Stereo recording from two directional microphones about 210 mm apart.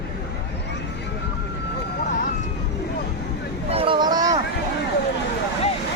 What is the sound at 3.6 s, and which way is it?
Boat, 25° right (ahead or behind).